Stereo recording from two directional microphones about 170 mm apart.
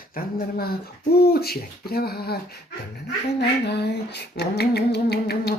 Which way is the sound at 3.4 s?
80° left.